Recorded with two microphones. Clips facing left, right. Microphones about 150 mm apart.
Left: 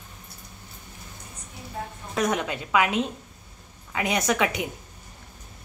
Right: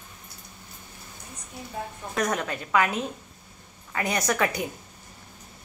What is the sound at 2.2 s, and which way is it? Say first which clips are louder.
Speech: left 2 dB; 5° left (ahead or behind).